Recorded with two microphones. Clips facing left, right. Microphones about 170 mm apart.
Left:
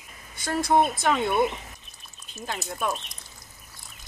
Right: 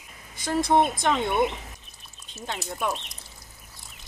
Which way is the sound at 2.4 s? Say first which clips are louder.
Even; centre (ahead or behind).